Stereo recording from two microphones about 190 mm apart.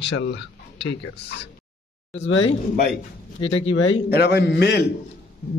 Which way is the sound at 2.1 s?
85° left.